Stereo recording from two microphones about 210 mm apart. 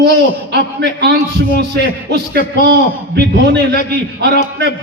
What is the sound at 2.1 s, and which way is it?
A man's voice, 50° right (ahead or behind).